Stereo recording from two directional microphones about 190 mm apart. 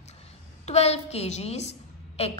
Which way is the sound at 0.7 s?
35° left (ahead or behind).